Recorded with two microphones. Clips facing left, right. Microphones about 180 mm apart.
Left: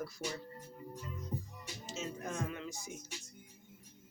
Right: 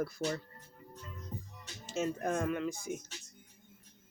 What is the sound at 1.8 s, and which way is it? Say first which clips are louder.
Speech: right 8 dB; 55° right (ahead or behind).